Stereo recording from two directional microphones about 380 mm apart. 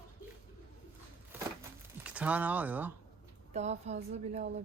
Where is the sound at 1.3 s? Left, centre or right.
Centre.